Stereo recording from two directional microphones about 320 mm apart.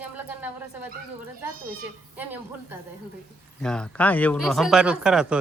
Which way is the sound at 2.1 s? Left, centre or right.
Centre.